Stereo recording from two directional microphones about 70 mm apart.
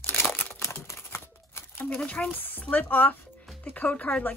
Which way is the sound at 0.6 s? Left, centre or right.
Left.